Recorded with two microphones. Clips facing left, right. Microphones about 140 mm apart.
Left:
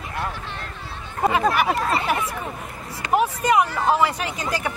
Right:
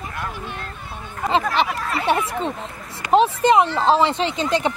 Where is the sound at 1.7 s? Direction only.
25° left (ahead or behind).